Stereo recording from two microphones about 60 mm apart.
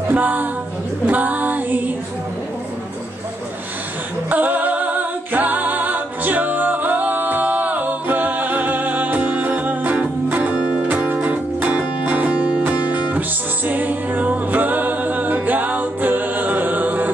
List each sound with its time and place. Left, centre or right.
0.1 s speech: right
1.0 s female singing: right
4.3 s music: right